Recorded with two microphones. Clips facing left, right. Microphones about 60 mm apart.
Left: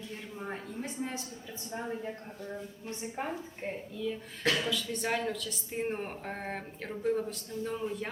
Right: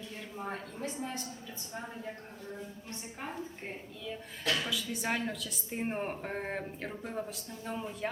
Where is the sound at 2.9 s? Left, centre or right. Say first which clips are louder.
Left 10 dB; centre.